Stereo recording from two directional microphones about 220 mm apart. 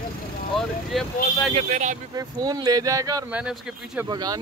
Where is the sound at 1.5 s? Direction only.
35° right (ahead or behind).